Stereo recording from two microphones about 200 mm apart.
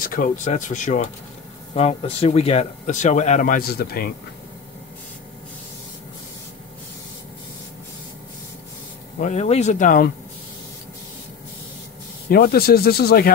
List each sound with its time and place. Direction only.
0.0 s speech: 45° left (ahead or behind)
9.2 s speech: 35° left (ahead or behind)
12.3 s speech: 50° left (ahead or behind)